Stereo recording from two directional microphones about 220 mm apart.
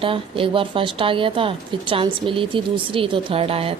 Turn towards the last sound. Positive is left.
turn(degrees=-25)  # may be behind; listen again after turning